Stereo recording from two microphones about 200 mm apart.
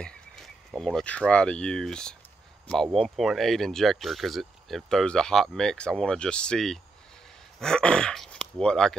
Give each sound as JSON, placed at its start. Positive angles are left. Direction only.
{"t": 0.0, "sound": "speech", "side_deg": 0}